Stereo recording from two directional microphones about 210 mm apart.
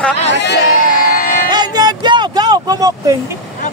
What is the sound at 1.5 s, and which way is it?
Vehicle, 20° right (ahead or behind).